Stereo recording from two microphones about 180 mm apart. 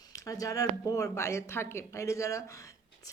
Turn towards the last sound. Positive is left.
turn(degrees=15)  # may be behind; listen again after turning